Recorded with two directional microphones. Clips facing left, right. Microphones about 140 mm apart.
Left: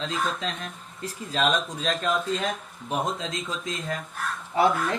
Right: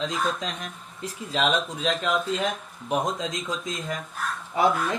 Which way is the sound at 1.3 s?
10° right (ahead or behind).